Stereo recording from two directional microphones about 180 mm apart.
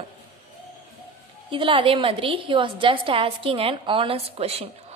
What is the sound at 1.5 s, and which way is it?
A woman's voice, 30° right (ahead or behind).